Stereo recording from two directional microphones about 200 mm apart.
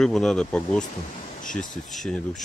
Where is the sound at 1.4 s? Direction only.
40° left (ahead or behind).